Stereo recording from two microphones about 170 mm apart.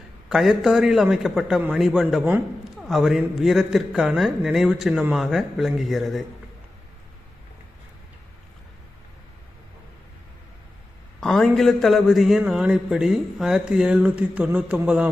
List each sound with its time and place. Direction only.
0.3 s a man's voice: centre (ahead or behind)
11.2 s a man's voice: centre (ahead or behind)